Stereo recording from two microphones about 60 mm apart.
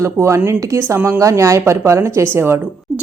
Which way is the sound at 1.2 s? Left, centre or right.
Right.